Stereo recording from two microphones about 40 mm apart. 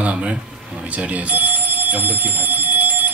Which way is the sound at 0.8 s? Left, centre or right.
Right.